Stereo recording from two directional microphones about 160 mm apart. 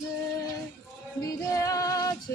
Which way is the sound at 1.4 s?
20° left (ahead or behind).